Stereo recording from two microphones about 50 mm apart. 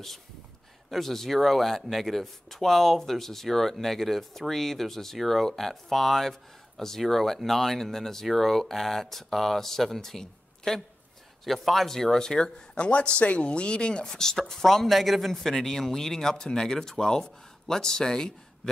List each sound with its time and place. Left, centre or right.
0.8 s a man's voice: centre